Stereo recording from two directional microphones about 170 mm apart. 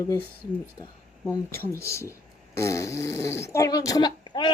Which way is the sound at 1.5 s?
15° left (ahead or behind).